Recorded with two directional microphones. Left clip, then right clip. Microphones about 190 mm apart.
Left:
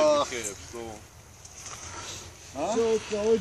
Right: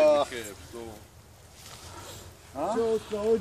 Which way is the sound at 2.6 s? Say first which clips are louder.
Left 2 dB; 40° left (ahead or behind).